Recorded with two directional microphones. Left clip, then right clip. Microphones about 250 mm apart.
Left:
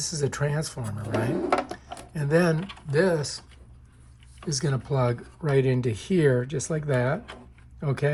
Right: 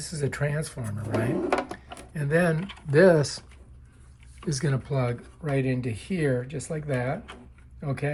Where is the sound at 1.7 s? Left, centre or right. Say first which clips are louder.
Left 2 dB; centre.